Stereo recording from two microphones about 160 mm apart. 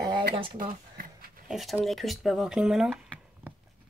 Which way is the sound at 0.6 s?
60° right (ahead or behind).